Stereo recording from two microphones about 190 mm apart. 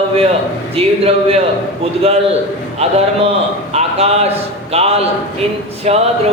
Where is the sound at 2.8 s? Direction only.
30° right (ahead or behind).